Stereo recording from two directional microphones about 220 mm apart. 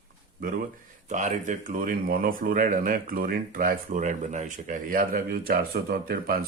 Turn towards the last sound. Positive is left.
turn(degrees=-40)  # may be behind; listen again after turning